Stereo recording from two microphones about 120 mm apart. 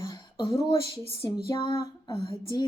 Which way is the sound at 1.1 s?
30° left (ahead or behind).